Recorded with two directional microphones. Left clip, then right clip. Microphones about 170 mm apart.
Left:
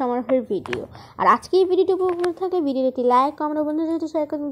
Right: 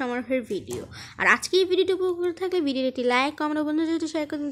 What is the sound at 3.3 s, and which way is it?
Speech, 35° right (ahead or behind).